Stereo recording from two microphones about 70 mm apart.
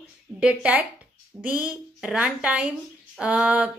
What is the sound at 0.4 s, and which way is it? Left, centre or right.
A woman's voice, centre.